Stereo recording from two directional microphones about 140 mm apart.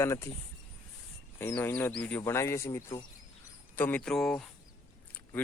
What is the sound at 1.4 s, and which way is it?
Speech, 15° left (ahead or behind).